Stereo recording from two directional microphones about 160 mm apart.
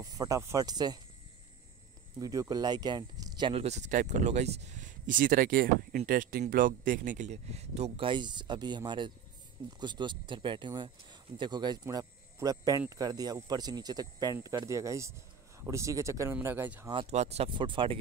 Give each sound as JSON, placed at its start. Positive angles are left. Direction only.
{"t": 0.0, "sound": "speech", "side_deg": -20}
{"t": 2.1, "sound": "speech", "side_deg": -20}
{"t": 16.8, "sound": "speech", "side_deg": -30}
{"t": 17.1, "sound": "speech", "side_deg": -40}